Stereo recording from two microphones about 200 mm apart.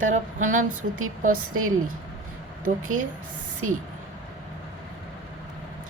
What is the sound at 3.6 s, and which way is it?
Speech, 90° right.